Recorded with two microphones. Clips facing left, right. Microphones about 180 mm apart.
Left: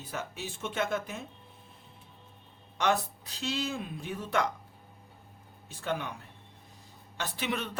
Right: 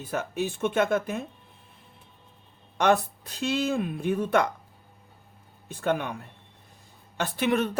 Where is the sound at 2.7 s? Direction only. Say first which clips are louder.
Right 6 dB; 55° right (ahead or behind).